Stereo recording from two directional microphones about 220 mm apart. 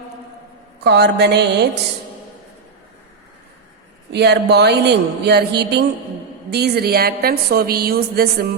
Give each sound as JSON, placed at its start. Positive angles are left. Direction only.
{"t": 0.9, "sound": "a woman's voice", "side_deg": -50}
{"t": 4.1, "sound": "a woman's voice", "side_deg": -50}